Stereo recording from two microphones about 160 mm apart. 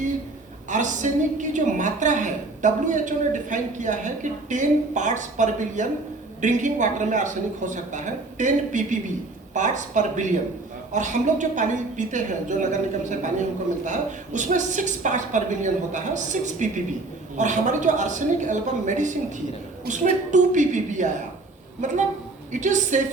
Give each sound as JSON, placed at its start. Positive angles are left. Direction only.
{"t": 0.7, "sound": "a woman's voice", "side_deg": -50}
{"t": 22.5, "sound": "a woman's voice", "side_deg": -50}